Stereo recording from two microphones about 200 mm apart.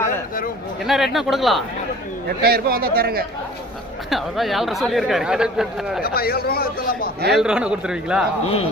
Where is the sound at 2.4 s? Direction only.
50° right (ahead or behind).